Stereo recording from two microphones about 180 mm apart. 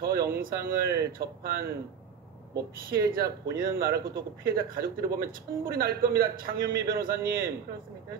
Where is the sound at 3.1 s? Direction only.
55° right (ahead or behind).